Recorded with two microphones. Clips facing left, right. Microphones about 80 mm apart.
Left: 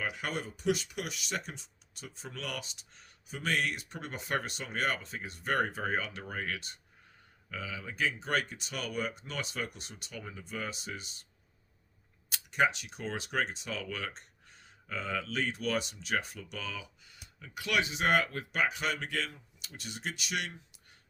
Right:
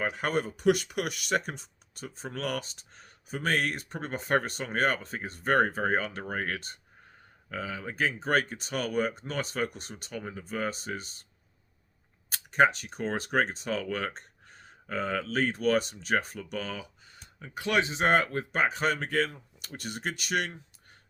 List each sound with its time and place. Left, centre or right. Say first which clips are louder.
0.0 s speech: right 7 dB; right
12.3 s speech: right 6 dB; right